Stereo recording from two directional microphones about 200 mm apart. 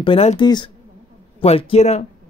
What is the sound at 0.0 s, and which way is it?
A man's voice, 30° left (ahead or behind).